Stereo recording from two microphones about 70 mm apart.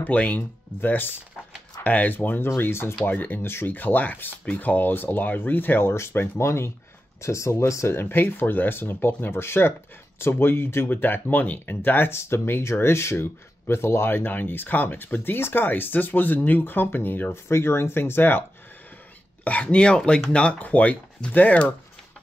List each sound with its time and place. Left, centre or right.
0.0 s speech: left
19.4 s speech: centre